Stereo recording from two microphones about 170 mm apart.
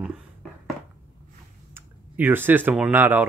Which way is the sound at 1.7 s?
10° right (ahead or behind).